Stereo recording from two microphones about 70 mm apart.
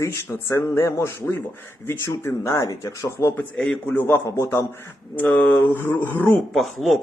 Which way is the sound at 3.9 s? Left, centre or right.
Left.